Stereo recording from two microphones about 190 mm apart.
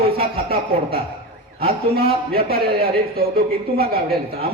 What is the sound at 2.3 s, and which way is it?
Speech, 55° right (ahead or behind).